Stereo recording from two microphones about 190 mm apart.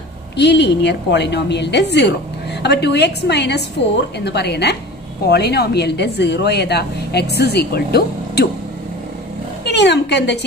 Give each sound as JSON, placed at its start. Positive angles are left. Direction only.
{"t": 0.4, "sound": "speech", "side_deg": 65}
{"t": 9.7, "sound": "speech", "side_deg": 65}